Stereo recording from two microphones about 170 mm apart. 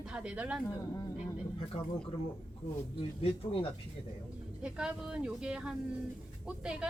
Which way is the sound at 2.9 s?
35° left (ahead or behind).